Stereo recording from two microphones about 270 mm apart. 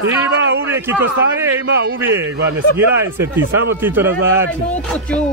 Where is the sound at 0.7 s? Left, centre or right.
Centre.